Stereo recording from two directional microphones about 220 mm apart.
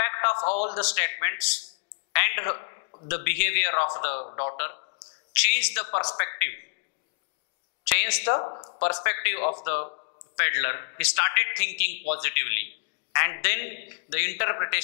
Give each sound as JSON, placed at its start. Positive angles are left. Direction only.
{"t": 0.0, "sound": "a sound", "side_deg": 15}
{"t": 0.6, "sound": "a man's voice", "side_deg": 10}
{"t": 2.1, "sound": "a sound", "side_deg": 15}
{"t": 3.1, "sound": "a man's voice", "side_deg": 15}
{"t": 5.0, "sound": "a sound", "side_deg": -10}
{"t": 5.4, "sound": "a man's voice", "side_deg": 10}
{"t": 7.9, "sound": "a man's voice", "side_deg": 15}
{"t": 8.4, "sound": "speech", "side_deg": 25}
{"t": 8.7, "sound": "a man's voice", "side_deg": 15}